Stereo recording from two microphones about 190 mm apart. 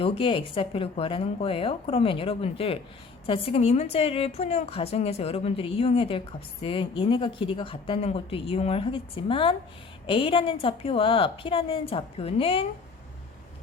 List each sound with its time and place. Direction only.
0.0 s a woman's voice: 30° left (ahead or behind)